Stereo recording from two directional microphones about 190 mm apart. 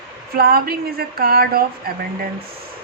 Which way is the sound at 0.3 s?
55° right (ahead or behind).